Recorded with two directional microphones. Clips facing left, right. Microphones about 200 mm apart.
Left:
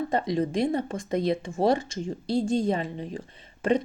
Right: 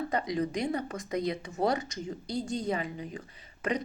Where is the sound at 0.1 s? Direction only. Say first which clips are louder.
Left 4 dB; 25° left (ahead or behind).